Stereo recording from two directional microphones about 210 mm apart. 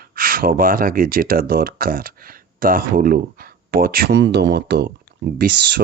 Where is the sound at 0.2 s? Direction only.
45° right (ahead or behind).